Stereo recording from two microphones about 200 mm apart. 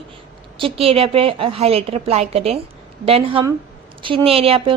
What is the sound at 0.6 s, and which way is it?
A woman's voice, 30° right (ahead or behind).